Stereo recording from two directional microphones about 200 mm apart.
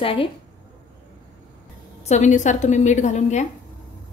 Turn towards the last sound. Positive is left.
turn(degrees=35)  # may be behind; listen again after turning